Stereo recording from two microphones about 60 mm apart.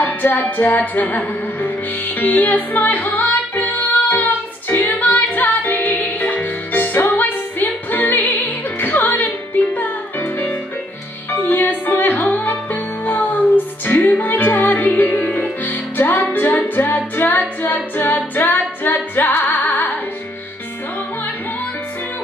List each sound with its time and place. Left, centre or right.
0.0 s music: left